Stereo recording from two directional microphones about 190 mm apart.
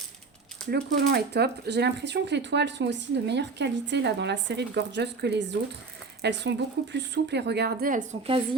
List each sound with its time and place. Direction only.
0.7 s speech: 60° right (ahead or behind)